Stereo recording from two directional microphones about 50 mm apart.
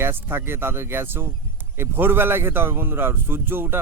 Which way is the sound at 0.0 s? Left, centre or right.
Right.